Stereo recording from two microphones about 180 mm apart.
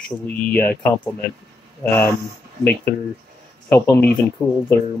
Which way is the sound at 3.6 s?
10° left (ahead or behind).